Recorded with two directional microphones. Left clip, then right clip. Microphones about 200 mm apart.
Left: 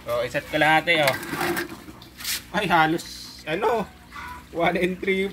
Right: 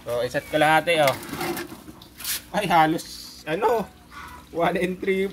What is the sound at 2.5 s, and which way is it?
Speech, 35° right (ahead or behind).